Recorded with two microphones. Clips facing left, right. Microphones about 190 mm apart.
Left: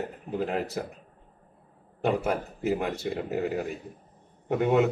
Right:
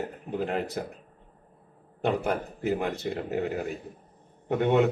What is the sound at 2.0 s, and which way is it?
A man's voice, centre (ahead or behind).